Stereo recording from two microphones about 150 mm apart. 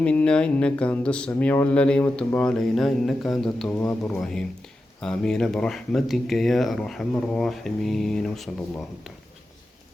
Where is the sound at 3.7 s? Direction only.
15° left (ahead or behind).